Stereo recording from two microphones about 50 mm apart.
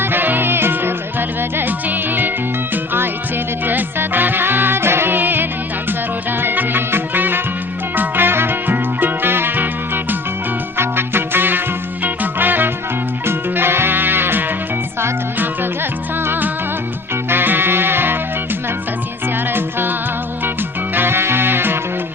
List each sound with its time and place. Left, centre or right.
0.0 s music: right
13.2 s music: right
19.5 s music: right